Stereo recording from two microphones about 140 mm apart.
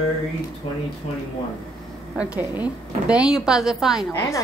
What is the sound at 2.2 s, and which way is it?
A woman's voice, 10° right (ahead or behind).